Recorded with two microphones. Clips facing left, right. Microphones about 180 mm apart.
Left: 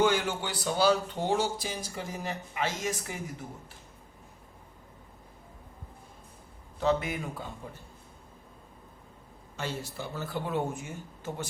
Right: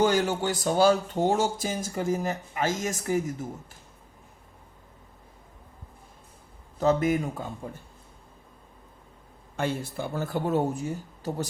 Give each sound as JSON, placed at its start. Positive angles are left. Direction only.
{"t": 0.0, "sound": "speech", "side_deg": -40}
{"t": 6.7, "sound": "speech", "side_deg": -45}
{"t": 9.6, "sound": "speech", "side_deg": -55}